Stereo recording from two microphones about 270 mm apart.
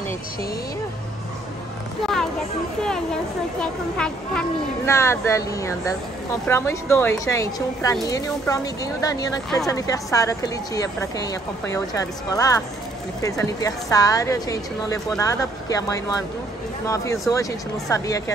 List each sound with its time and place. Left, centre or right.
3.6 s a woman's voice: centre
9.5 s a woman's voice: centre
9.8 s a woman's voice: centre